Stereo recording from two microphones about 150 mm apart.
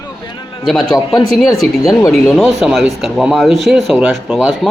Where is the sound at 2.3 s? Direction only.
Centre (ahead or behind).